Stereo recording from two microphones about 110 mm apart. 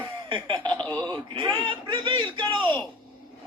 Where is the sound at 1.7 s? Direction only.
50° right (ahead or behind).